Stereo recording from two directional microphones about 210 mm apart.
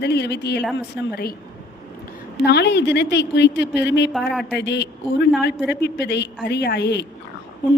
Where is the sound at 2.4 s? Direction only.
55° left (ahead or behind).